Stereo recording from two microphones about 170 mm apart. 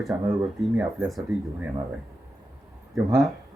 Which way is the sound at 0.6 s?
Centre (ahead or behind).